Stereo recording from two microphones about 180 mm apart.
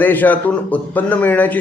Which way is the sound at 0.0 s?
10° left (ahead or behind).